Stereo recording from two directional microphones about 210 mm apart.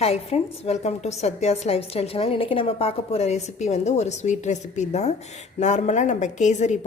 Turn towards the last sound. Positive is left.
turn(degrees=35)  # may be behind; listen again after turning